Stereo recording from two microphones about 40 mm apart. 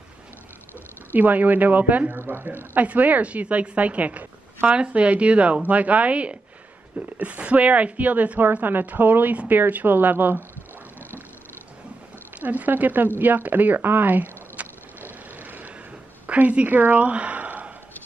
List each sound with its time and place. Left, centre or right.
1.1 s a woman's voice: right
2.2 s a woman's voice: right
2.8 s a woman's voice: right
4.6 s a woman's voice: right
12.4 s a woman's voice: right
13.2 s a sound: right
16.3 s a woman's voice: right
17.1 s sigh: right